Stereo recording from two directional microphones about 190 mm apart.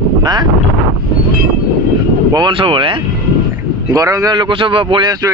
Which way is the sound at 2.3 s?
25° right (ahead or behind).